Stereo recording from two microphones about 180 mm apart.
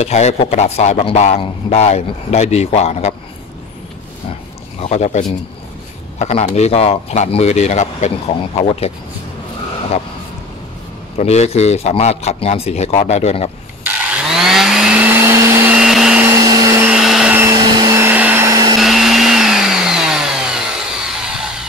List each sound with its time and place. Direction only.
0.0 s a man's voice: 35° left (ahead or behind)
4.8 s a man's voice: 40° left (ahead or behind)
11.1 s a man's voice: 35° left (ahead or behind)
13.8 s vacuum cleaner: 5° right (ahead or behind)
16.3 s vacuum cleaner: 20° right (ahead or behind)
16.8 s vacuum cleaner: 5° right (ahead or behind)
17.5 s vacuum cleaner: 20° right (ahead or behind)
18.8 s vacuum cleaner: centre (ahead or behind)
21.1 s music: 5° right (ahead or behind)